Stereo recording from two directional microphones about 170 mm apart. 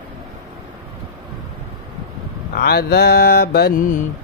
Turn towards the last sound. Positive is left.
turn(degrees=50)  # may be behind; listen again after turning